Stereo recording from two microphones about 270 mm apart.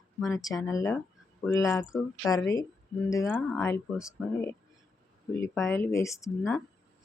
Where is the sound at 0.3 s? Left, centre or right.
Centre.